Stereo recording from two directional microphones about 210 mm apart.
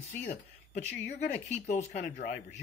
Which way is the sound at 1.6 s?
35° left (ahead or behind).